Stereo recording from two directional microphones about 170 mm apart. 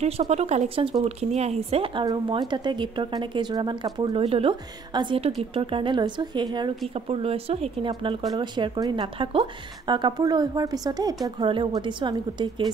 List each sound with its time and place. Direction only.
0.0 s a woman's voice: 40° right (ahead or behind)